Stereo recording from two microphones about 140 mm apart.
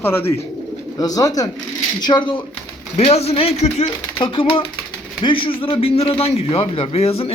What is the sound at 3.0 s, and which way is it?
A man's voice, 45° left (ahead or behind).